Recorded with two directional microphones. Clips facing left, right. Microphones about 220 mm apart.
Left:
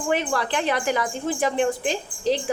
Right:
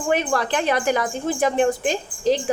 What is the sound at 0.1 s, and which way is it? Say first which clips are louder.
A woman's voice: right 3 dB; 50° right (ahead or behind).